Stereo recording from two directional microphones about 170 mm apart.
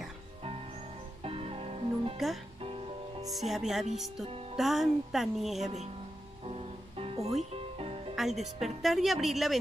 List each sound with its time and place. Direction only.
1.2 s music: 35° right (ahead or behind)
2.1 s a woman's voice: centre (ahead or behind)
6.4 s music: 35° right (ahead or behind)
8.2 s a woman's voice: centre (ahead or behind)